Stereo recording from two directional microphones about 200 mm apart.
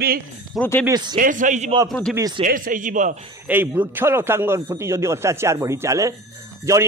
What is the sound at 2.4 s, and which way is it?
Speech, 45° right (ahead or behind).